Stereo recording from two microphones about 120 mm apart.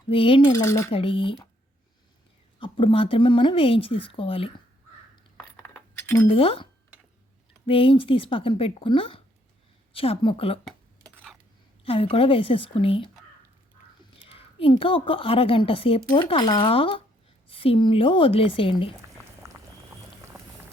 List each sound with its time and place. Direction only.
0.1 s a woman's voice: 45° left (ahead or behind)
0.4 s speech: 25° left (ahead or behind)
0.9 s a woman's voice: 50° left (ahead or behind)
2.6 s a woman's voice: 50° left (ahead or behind)
5.4 s a sound: 20° left (ahead or behind)
6.2 s a woman's voice: 50° left (ahead or behind)
7.7 s a woman's voice: 50° left (ahead or behind)
10.7 s a sound: 5° left (ahead or behind)
11.9 s a woman's voice: 50° left (ahead or behind)
14.3 s a woman's voice: 50° left (ahead or behind)
19.1 s a sound: 25° right (ahead or behind)